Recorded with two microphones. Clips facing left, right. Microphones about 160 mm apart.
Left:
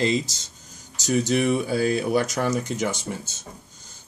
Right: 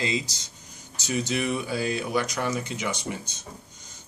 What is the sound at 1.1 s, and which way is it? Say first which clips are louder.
Speech: left 6 dB; 45° left (ahead or behind).